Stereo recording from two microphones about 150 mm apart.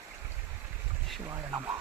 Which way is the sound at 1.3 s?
25° right (ahead or behind).